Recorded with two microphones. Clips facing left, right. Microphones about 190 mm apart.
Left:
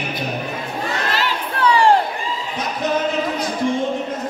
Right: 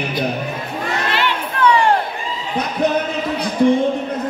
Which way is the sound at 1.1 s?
40° left (ahead or behind).